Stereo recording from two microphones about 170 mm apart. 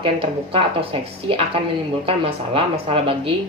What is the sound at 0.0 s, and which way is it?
Speech, 30° right (ahead or behind).